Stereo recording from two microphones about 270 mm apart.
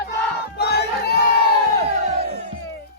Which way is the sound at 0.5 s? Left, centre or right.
Left.